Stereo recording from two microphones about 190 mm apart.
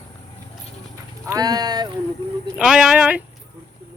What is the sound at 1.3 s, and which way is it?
Speech, 20° right (ahead or behind).